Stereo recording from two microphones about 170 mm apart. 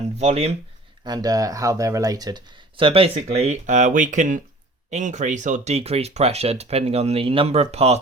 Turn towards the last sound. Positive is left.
turn(degrees=-40)  # may be behind; listen again after turning